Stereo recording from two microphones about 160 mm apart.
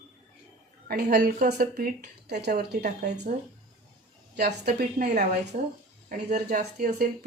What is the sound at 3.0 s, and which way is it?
Speech, 50° right (ahead or behind).